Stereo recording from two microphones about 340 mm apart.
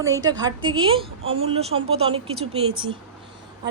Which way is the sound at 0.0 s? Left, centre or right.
Centre.